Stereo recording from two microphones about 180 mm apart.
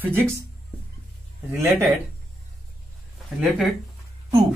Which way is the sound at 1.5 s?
15° right (ahead or behind).